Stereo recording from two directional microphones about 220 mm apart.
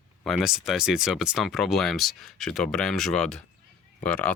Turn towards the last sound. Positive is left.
turn(degrees=5)  # may be behind; listen again after turning